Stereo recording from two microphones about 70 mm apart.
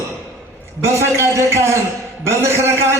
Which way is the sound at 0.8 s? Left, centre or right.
Right.